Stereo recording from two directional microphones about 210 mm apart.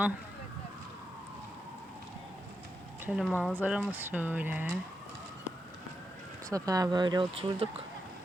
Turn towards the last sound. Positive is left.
turn(degrees=-25)  # may be behind; listen again after turning